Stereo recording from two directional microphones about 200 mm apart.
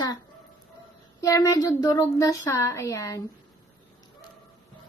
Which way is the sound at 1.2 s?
15° left (ahead or behind).